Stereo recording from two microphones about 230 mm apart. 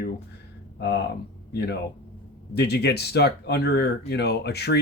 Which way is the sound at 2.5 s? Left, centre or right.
Left.